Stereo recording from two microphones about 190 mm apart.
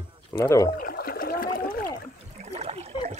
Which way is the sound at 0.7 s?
55° left (ahead or behind).